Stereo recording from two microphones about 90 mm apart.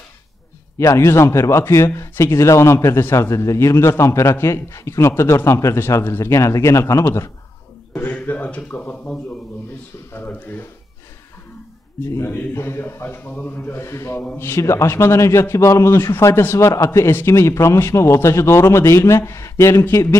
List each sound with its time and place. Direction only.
0.7 s speech: 30° left (ahead or behind)
7.9 s a sound: 20° left (ahead or behind)
8.3 s a man's voice: 15° left (ahead or behind)
12.0 s a man's voice: 35° left (ahead or behind)